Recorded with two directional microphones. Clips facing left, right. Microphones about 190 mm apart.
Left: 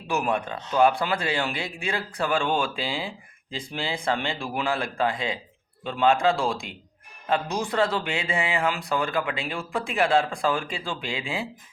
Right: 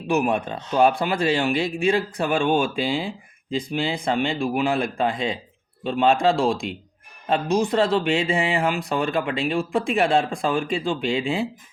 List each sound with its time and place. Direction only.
0.1 s speech: 20° right (ahead or behind)